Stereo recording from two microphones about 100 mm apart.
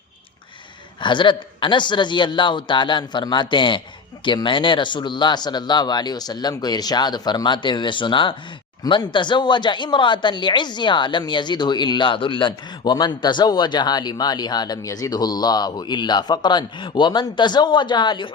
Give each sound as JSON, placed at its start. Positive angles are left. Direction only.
{"t": 1.0, "sound": "speech", "side_deg": 55}